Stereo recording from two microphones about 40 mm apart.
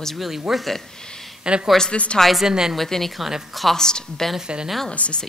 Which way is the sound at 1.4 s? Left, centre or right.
Right.